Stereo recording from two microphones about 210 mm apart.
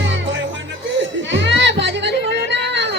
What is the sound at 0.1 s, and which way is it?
Music, 60° right (ahead or behind).